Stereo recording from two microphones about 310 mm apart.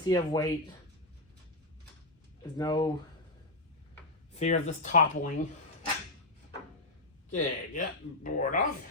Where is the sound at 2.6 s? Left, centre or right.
Centre.